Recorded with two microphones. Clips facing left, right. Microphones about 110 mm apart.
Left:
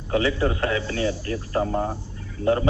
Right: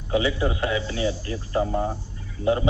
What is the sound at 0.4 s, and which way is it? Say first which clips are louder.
Speech: left 1 dB; 45° left (ahead or behind).